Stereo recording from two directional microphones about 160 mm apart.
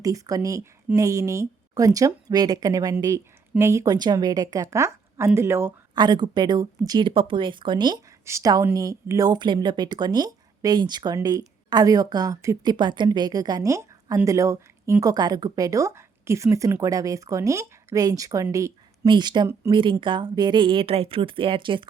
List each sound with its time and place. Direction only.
0.0 s a woman's voice: 20° right (ahead or behind)
5.9 s speech: 25° right (ahead or behind)